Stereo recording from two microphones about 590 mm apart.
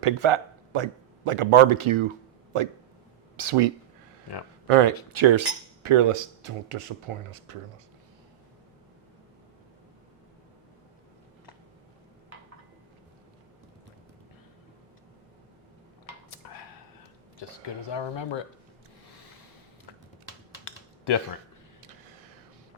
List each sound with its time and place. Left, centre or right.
0.0 s speech: right
4.7 s speech: right
17.8 s speech: left
20.7 s computer keyboard: left